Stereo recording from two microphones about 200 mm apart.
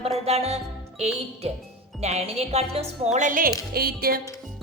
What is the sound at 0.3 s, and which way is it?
Music, 30° right (ahead or behind).